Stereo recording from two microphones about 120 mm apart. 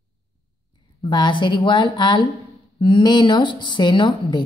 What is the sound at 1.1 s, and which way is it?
A woman's voice, 40° left (ahead or behind).